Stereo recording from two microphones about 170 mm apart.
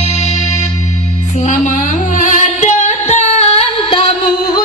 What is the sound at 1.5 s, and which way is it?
Music, 50° left (ahead or behind).